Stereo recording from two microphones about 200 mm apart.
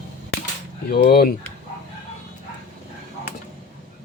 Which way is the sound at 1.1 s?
50° left (ahead or behind).